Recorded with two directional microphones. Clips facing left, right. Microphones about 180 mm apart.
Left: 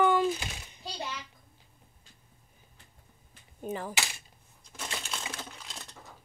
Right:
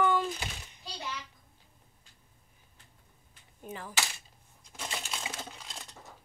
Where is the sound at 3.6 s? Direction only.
35° left (ahead or behind).